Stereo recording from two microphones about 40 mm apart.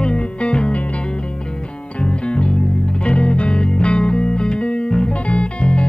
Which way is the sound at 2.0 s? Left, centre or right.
Left.